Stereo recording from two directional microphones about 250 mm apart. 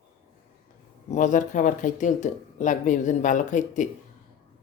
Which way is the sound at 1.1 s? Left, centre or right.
Left.